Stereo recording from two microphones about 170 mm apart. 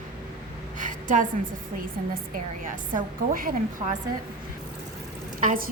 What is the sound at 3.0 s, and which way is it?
Speech, 55° right (ahead or behind).